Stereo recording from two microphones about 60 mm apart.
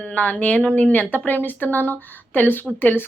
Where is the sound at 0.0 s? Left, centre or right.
Left.